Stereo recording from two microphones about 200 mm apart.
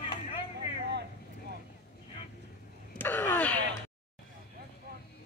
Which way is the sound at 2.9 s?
10° left (ahead or behind).